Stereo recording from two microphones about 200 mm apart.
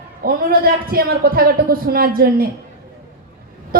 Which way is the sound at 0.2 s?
50° right (ahead or behind).